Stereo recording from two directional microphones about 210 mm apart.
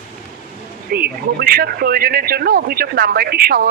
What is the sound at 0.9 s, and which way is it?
Speech, 45° right (ahead or behind).